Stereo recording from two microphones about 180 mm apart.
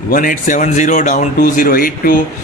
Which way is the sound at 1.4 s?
55° left (ahead or behind).